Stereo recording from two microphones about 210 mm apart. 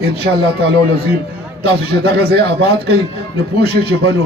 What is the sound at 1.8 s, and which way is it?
A man's voice, 50° right (ahead or behind).